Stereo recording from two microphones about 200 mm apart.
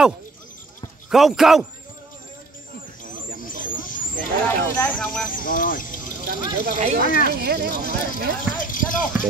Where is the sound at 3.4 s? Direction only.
45° left (ahead or behind).